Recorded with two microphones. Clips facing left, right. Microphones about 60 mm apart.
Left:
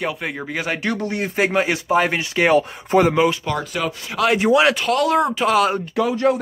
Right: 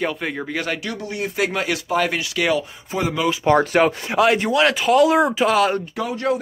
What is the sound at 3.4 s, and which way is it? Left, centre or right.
Speech, right.